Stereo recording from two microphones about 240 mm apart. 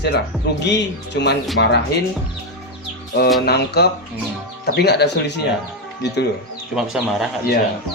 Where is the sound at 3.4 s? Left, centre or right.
Left.